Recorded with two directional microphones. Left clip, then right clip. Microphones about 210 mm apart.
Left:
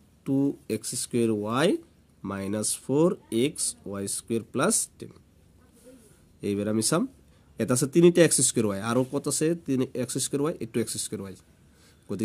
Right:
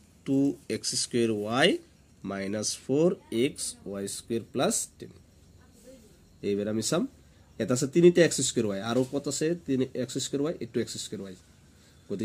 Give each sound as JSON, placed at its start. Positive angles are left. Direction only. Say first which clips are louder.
{"t": 0.2, "sound": "speech", "louder": "even", "side_deg": 55}
{"t": 6.4, "sound": "speech", "louder": "left 2 dB", "side_deg": 55}